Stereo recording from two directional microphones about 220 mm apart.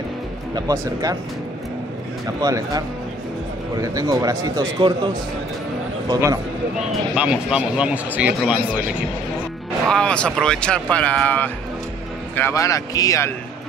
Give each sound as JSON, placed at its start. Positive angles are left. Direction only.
{"t": 0.6, "sound": "a man's voice", "side_deg": -15}
{"t": 2.4, "sound": "a man's voice", "side_deg": -15}
{"t": 3.8, "sound": "a man's voice", "side_deg": -15}
{"t": 7.2, "sound": "speech", "side_deg": -5}
{"t": 9.8, "sound": "speech", "side_deg": 5}